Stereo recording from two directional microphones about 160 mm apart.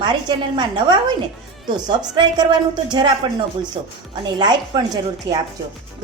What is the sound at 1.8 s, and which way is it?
A woman's voice, 25° right (ahead or behind).